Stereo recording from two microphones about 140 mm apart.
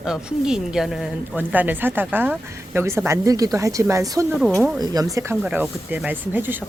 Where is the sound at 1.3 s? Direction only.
10° right (ahead or behind).